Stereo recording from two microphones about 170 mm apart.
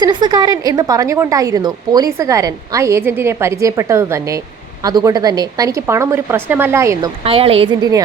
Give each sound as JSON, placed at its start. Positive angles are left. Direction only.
{"t": 0.0, "sound": "a woman's voice", "side_deg": -25}
{"t": 7.3, "sound": "speech", "side_deg": -35}